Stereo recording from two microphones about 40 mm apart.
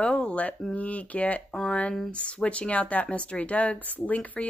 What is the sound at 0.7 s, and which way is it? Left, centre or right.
A woman's voice, left.